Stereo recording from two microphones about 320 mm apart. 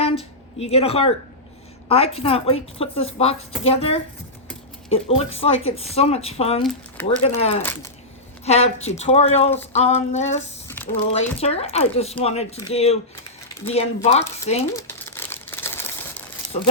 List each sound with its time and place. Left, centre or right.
0.0 s a sound: centre
1.9 s a woman's voice: centre
6.6 s speech: centre
7.2 s speech: centre
7.6 s a woman's voice: centre
8.4 s speech: centre
10.7 s a sound: centre
11.3 s speech: centre
14.7 s crumpling: centre